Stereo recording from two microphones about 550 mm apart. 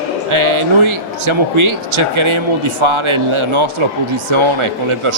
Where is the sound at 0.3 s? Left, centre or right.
Right.